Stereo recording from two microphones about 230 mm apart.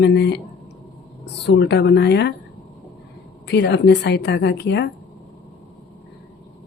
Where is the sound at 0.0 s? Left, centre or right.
Left.